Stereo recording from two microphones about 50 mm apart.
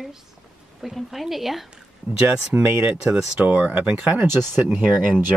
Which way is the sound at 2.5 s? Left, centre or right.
Right.